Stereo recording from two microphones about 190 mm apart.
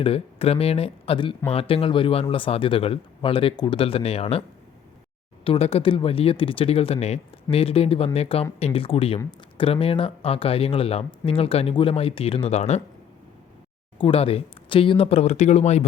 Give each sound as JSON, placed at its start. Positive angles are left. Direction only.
{"t": 0.0, "sound": "speech", "side_deg": 30}
{"t": 5.5, "sound": "speech", "side_deg": 30}
{"t": 14.0, "sound": "speech", "side_deg": 30}